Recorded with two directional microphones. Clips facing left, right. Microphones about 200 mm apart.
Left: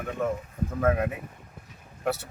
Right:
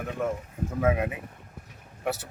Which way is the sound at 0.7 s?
5° right (ahead or behind).